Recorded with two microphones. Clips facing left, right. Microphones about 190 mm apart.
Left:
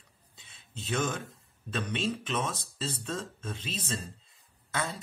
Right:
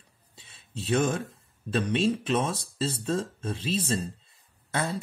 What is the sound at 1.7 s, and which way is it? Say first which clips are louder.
Speech: right 7 dB; 30° right (ahead or behind).